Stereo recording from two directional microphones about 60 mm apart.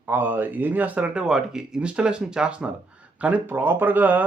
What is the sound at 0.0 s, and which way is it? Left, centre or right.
Speech, right.